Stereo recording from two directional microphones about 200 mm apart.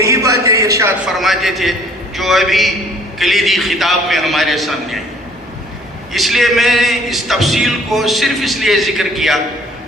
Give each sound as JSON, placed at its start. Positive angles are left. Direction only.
{"t": 0.0, "sound": "a sound", "side_deg": -15}
{"t": 1.0, "sound": "a man's voice", "side_deg": 0}
{"t": 6.1, "sound": "a man's voice", "side_deg": 0}